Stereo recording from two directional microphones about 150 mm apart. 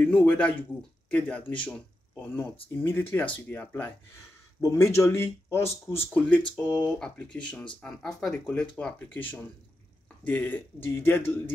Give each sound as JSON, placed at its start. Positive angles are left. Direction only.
{"t": 0.0, "sound": "speech", "side_deg": 10}